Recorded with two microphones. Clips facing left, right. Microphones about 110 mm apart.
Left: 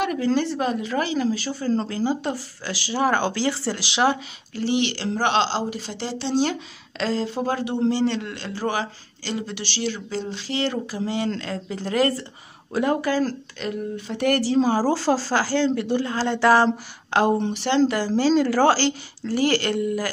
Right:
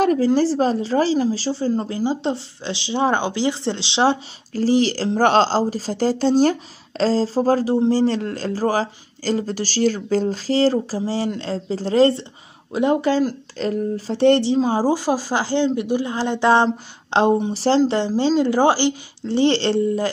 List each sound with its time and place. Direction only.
0.0 s speech: 35° right (ahead or behind)
13.6 s speech: 35° right (ahead or behind)